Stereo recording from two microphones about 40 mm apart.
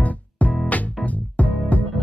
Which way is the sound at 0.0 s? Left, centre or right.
Left.